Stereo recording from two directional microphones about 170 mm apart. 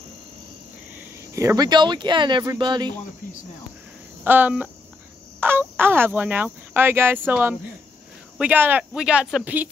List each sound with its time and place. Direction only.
0.9 s speech: 20° right (ahead or behind)
4.2 s speech: 10° right (ahead or behind)